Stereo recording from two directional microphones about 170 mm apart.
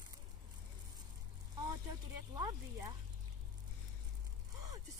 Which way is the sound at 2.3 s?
20° right (ahead or behind).